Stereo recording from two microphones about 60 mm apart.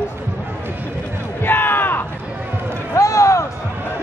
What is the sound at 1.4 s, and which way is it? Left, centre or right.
Crowd, left.